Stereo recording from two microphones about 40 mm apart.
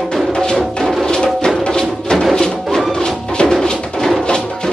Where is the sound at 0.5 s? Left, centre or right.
Centre.